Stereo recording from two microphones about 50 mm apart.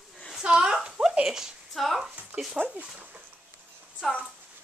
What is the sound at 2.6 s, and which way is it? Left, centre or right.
Speech, right.